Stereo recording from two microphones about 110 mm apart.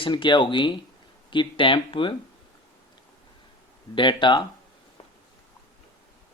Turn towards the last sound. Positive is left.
turn(degrees=45)  # may be behind; listen again after turning